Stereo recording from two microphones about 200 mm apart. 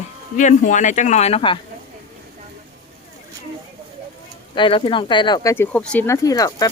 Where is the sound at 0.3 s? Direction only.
40° left (ahead or behind).